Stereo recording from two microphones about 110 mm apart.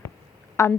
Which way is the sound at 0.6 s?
25° left (ahead or behind).